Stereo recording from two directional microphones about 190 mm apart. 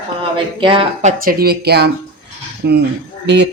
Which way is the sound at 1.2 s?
50° right (ahead or behind).